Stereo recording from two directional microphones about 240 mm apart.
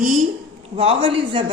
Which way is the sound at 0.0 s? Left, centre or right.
Right.